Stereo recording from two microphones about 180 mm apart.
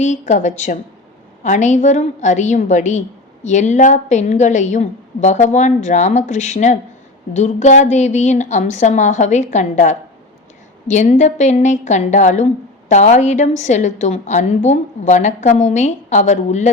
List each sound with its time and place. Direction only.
0.0 s a woman's voice: 40° left (ahead or behind)